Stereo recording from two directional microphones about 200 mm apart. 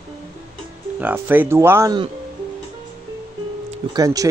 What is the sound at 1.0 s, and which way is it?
Speech, 10° right (ahead or behind).